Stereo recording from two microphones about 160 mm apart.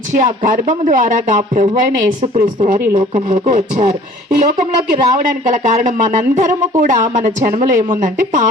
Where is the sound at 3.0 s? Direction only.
55° right (ahead or behind).